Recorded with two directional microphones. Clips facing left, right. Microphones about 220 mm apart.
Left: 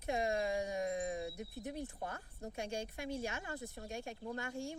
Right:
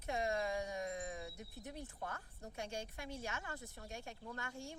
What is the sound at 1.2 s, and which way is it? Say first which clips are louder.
Speech: left 7 dB; 10° left (ahead or behind).